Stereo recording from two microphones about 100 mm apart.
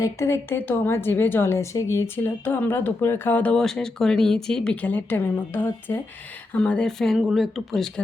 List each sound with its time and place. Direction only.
0.0 s a woman's voice: 30° left (ahead or behind); by 7.9 s centre (ahead or behind)